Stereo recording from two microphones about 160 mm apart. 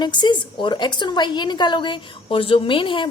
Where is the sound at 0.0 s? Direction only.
30° left (ahead or behind).